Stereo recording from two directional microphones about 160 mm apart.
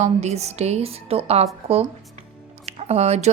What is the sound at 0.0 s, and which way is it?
A woman's voice, 45° right (ahead or behind).